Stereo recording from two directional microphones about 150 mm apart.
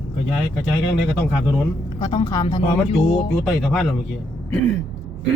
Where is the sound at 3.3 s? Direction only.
Centre (ahead or behind).